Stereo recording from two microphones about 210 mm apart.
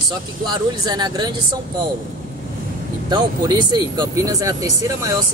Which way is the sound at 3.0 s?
20° right (ahead or behind).